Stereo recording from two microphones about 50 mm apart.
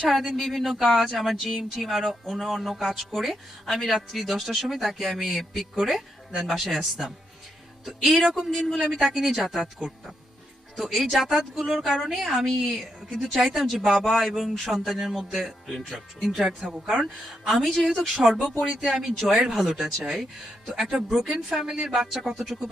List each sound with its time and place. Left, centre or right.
0.1 s speech: centre
6.4 s speech: centre
9.0 s speech: centre
10.8 s speech: centre
13.3 s speech: centre
16.6 s a woman's voice: centre
16.9 s speech: centre